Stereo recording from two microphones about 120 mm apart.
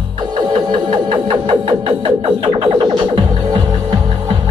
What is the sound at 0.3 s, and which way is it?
Music, 40° right (ahead or behind).